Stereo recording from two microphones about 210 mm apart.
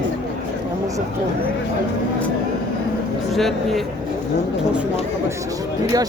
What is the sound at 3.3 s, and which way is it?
Speech, centre (ahead or behind).